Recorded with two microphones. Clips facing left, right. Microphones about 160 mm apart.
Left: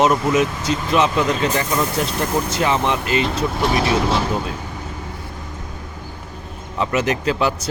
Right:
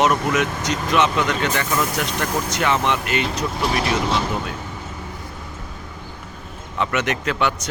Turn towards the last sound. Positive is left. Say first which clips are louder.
# left 2 dB
turn(degrees=30)  # may be behind; listen again after turning